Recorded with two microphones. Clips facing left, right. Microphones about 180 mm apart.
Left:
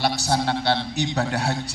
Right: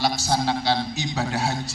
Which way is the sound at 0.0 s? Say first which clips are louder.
Even; 65° left (ahead or behind).